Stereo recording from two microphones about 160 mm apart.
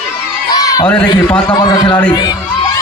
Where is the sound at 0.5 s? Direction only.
25° left (ahead or behind).